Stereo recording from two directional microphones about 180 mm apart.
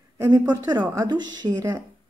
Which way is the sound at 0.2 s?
20° right (ahead or behind).